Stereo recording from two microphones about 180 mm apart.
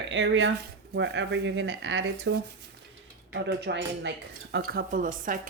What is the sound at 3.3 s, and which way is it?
Speech, 75° right (ahead or behind).